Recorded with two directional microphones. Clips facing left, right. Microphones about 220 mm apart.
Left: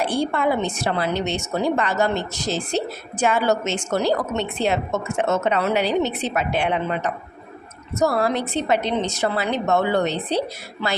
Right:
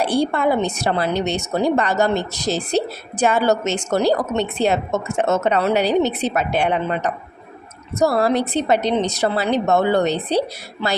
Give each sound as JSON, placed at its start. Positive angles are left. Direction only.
{"t": 0.0, "sound": "a woman's voice", "side_deg": -35}